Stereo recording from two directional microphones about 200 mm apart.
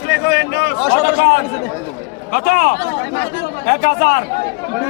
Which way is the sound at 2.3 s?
45° left (ahead or behind).